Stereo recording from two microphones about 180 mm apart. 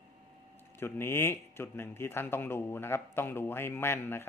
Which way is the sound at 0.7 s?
15° left (ahead or behind).